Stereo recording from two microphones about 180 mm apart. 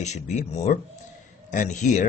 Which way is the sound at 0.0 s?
40° left (ahead or behind).